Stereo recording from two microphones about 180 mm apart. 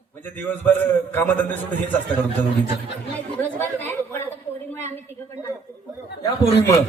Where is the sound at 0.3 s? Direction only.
10° left (ahead or behind).